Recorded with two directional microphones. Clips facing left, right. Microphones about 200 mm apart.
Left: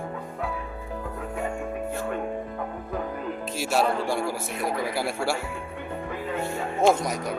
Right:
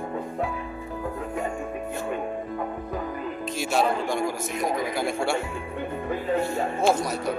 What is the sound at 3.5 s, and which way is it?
Speech, 5° left (ahead or behind).